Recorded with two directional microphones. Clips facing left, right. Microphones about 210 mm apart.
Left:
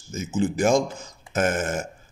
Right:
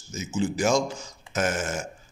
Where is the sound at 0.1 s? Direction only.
55° left (ahead or behind).